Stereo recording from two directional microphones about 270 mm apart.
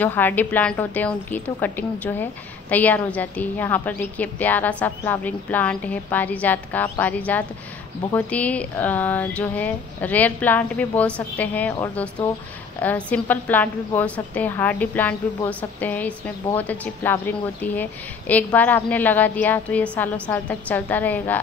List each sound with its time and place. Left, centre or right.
0.0 s a woman's voice: centre